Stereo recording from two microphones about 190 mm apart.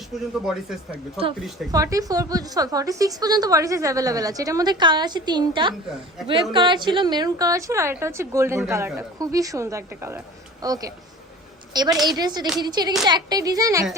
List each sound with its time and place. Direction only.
0.4 s speech: centre (ahead or behind)
1.7 s a woman's voice: 20° right (ahead or behind)